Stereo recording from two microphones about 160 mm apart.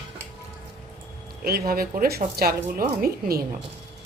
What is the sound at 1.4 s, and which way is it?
Speech, 70° right (ahead or behind).